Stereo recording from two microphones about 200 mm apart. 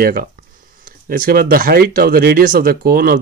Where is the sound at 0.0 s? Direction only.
45° right (ahead or behind).